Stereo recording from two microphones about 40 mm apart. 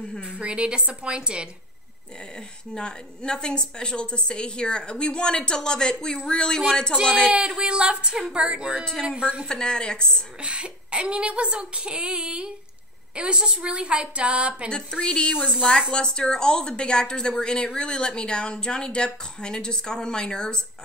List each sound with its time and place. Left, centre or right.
0.2 s speech: right
2.7 s a woman's voice: left
7.3 s speech: centre
7.6 s speech: right
9.5 s a woman's voice: left
10.4 s speech: right
14.7 s a woman's voice: left